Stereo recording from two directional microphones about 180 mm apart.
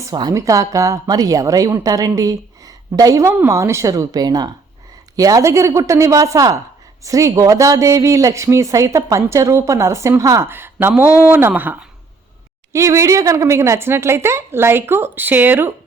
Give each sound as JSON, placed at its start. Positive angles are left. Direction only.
{"t": 0.0, "sound": "a woman's voice", "side_deg": -20}